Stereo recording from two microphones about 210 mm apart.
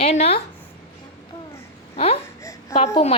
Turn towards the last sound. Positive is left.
turn(degrees=30)  # may be behind; listen again after turning